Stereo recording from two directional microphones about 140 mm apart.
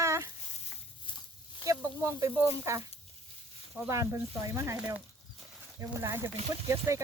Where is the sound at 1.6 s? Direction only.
20° right (ahead or behind).